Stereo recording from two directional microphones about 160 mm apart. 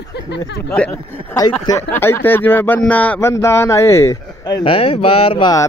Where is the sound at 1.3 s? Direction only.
20° left (ahead or behind).